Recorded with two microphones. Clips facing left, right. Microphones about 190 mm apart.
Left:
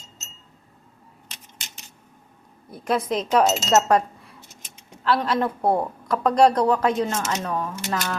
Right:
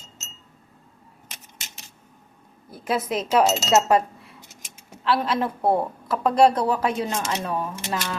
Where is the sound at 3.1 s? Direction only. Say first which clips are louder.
Even; 5° right (ahead or behind).